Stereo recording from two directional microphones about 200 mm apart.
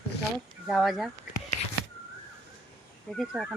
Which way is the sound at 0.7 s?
Centre (ahead or behind).